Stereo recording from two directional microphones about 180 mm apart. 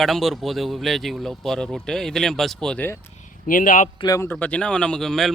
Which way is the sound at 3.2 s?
45° left (ahead or behind).